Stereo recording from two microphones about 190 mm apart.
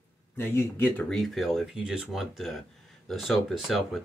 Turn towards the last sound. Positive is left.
turn(degrees=0)  # may be behind; listen again after turning